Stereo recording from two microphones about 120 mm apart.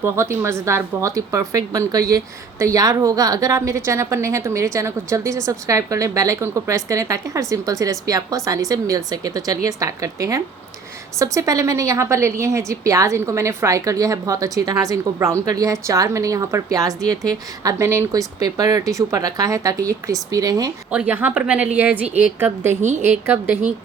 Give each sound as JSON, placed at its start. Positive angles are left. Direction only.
{"t": 0.0, "sound": "a woman's voice", "side_deg": -20}
{"t": 20.9, "sound": "a woman's voice", "side_deg": -15}
{"t": 22.8, "sound": "a woman's voice", "side_deg": -75}
{"t": 23.0, "sound": "a woman's voice", "side_deg": -15}